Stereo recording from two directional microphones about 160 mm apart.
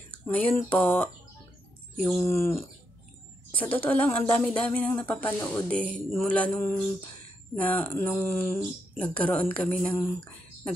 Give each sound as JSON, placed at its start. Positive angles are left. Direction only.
{"t": 0.1, "sound": "a sound", "side_deg": 10}
{"t": 0.6, "sound": "speech", "side_deg": 10}
{"t": 2.2, "sound": "speech", "side_deg": 15}